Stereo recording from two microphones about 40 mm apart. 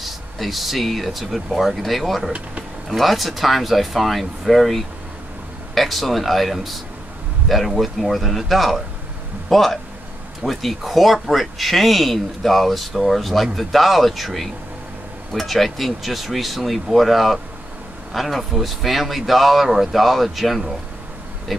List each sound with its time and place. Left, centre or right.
0.0 s speech: centre